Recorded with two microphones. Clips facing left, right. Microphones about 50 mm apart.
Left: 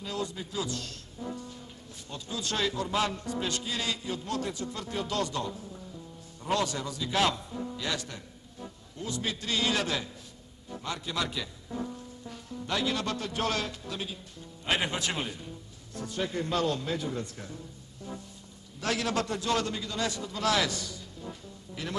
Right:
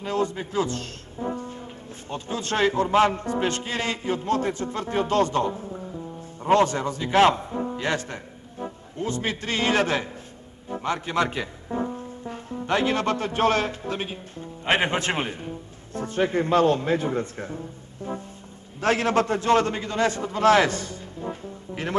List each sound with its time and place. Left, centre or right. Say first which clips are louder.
0.0 s a man's voice: right 9 dB; right